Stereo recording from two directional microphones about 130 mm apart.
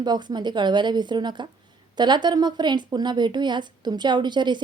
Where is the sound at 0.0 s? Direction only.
35° right (ahead or behind).